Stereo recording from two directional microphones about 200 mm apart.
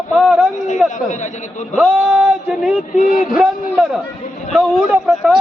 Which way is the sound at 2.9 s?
45° left (ahead or behind).